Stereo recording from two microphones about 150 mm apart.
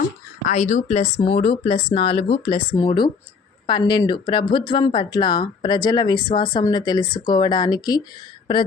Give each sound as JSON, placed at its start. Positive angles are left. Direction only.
{"t": 0.4, "sound": "speech", "side_deg": 55}
{"t": 2.7, "sound": "speech", "side_deg": 30}